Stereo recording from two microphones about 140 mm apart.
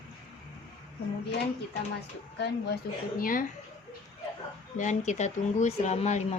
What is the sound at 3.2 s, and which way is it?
Speech, 90° left.